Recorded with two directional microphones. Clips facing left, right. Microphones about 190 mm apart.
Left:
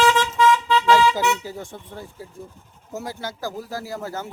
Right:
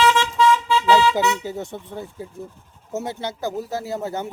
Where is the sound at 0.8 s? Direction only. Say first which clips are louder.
Right 1 dB; 20° right (ahead or behind).